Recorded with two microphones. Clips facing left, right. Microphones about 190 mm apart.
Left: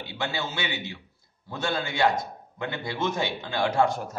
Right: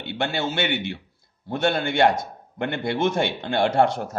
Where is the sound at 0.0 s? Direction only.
65° right (ahead or behind).